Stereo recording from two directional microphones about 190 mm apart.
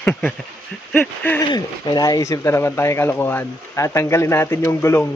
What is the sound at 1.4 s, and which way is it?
Speech, 20° left (ahead or behind).